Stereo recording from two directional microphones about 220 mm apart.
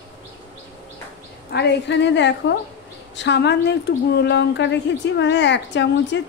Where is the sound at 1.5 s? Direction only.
50° left (ahead or behind).